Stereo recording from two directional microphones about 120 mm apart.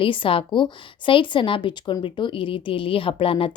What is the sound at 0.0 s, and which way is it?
Speech, 45° left (ahead or behind).